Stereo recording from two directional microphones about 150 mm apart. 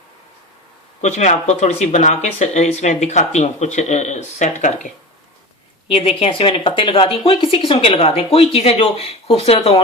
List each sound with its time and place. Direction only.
1.0 s speech: 50° left (ahead or behind)
5.9 s speech: 40° left (ahead or behind)